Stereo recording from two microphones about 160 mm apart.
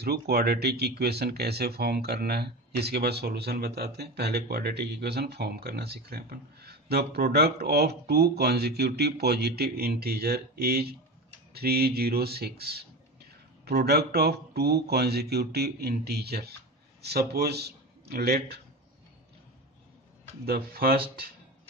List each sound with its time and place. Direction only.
0.0 s a man's voice: 75° right (ahead or behind)
20.4 s speech: 75° right (ahead or behind)